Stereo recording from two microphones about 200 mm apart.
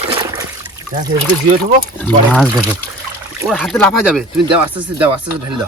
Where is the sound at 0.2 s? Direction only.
15° right (ahead or behind).